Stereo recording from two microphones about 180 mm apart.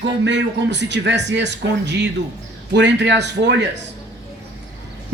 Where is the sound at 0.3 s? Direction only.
75° right (ahead or behind).